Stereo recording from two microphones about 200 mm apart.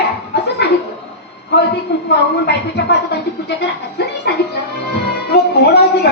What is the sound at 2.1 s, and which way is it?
A man's voice, 55° left (ahead or behind).